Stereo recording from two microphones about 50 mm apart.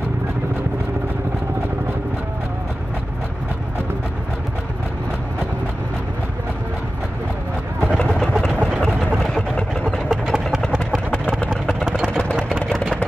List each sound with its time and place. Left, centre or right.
8.1 s vehicle: centre
11.1 s a sound: left
12.1 s vehicle: centre